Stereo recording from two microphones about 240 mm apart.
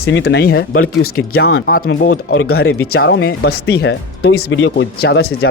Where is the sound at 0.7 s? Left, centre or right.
Left.